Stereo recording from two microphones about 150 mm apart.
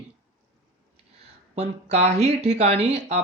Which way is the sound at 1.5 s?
45° right (ahead or behind).